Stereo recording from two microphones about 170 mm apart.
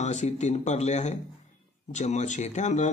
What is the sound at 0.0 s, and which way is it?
Speech, 45° left (ahead or behind).